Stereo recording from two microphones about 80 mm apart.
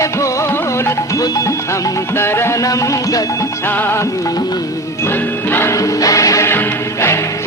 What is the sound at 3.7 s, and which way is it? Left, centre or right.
Music, left.